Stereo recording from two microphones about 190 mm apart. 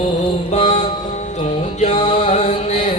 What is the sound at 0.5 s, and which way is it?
Mantra, 35° left (ahead or behind).